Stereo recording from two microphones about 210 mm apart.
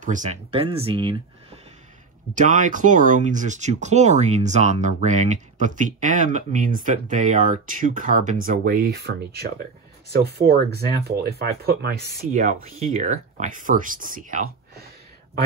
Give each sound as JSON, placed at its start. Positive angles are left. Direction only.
{"t": 0.0, "sound": "speech", "side_deg": -35}
{"t": 2.3, "sound": "speech", "side_deg": -35}